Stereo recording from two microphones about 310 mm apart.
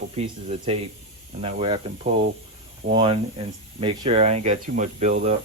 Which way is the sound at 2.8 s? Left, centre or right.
Centre.